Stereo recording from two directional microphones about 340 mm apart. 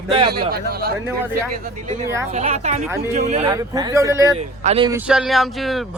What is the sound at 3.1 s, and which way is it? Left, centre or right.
Speech, centre.